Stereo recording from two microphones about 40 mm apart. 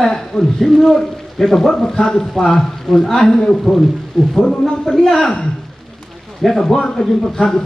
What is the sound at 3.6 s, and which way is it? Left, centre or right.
Speech, centre.